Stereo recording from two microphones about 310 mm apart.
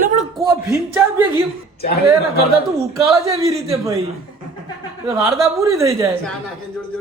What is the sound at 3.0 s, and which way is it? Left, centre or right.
A man's voice, centre.